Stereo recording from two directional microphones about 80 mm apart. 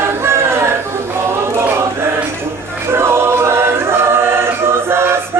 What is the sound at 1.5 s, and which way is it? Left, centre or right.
Chant, right.